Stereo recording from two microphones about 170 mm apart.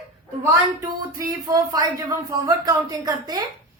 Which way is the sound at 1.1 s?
20° right (ahead or behind).